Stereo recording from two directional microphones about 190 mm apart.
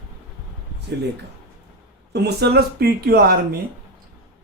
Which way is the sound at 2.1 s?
60° right (ahead or behind).